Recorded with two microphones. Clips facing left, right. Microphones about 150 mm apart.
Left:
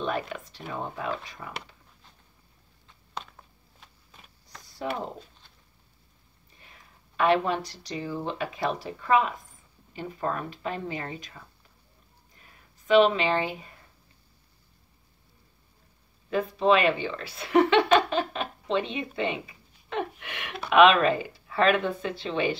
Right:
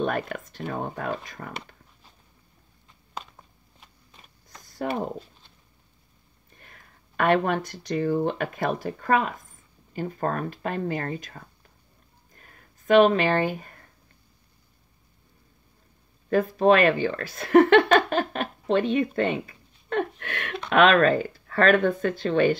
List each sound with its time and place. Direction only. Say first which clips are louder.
0.0 s speech: right 3 dB; 50° right (ahead or behind)
3.2 s a sound: even; 5° right (ahead or behind)
4.6 s speech: right 4 dB; 50° right (ahead or behind)
6.5 s speech: right 2 dB; 50° right (ahead or behind)
12.4 s a sound: right 3 dB; 50° right (ahead or behind)
16.3 s speech: right 4 dB; 50° right (ahead or behind)
20.5 s speech: even; 5° left (ahead or behind)
21.3 s speech: right 3 dB; 50° right (ahead or behind)